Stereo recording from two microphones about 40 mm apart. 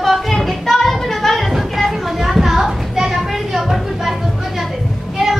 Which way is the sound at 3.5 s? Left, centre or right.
Centre.